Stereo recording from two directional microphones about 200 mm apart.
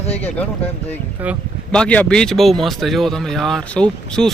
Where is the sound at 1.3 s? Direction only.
5° left (ahead or behind).